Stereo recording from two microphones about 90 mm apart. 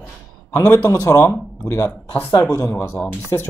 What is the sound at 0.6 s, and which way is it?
Speech, 25° left (ahead or behind).